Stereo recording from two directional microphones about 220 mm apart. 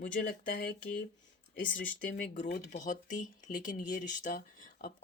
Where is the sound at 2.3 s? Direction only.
35° left (ahead or behind).